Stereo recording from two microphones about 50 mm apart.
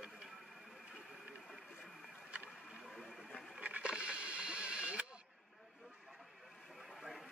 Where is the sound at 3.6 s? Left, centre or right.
Right.